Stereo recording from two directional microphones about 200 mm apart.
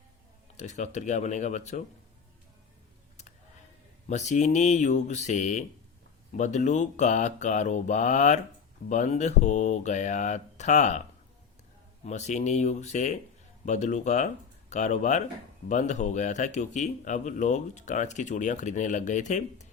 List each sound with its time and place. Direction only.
0.5 s speech: 35° left (ahead or behind)
4.1 s speech: 35° left (ahead or behind)
12.0 s speech: 35° left (ahead or behind)